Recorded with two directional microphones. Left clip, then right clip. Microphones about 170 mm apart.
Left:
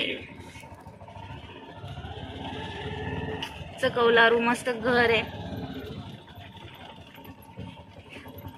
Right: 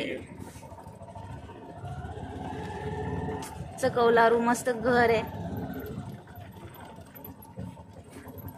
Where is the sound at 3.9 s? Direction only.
15° right (ahead or behind).